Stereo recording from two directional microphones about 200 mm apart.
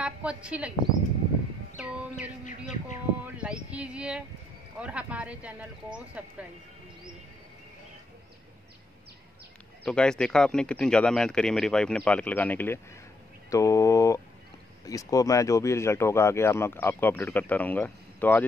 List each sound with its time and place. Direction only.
0.0 s a woman's voice: 5° right (ahead or behind)
2.4 s bird: 40° left (ahead or behind)
3.3 s speech: 5° right (ahead or behind)
9.8 s speech: 5° left (ahead or behind)